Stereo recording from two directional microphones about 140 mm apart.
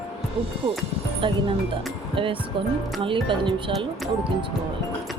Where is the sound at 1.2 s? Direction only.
40° right (ahead or behind).